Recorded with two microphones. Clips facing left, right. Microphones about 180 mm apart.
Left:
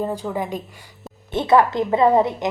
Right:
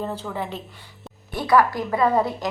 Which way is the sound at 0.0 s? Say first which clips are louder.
Left 4 dB; 15° left (ahead or behind).